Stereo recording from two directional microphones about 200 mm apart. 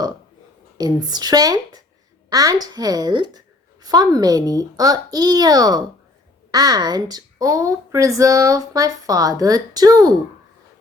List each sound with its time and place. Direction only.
0.8 s a woman's voice: 20° right (ahead or behind)